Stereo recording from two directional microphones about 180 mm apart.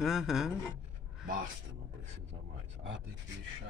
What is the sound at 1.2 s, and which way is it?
Speech, 50° right (ahead or behind).